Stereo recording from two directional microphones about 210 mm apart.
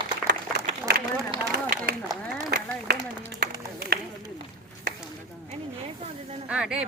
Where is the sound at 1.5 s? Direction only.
50° right (ahead or behind).